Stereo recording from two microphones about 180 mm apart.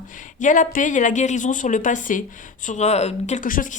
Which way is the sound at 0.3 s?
45° left (ahead or behind).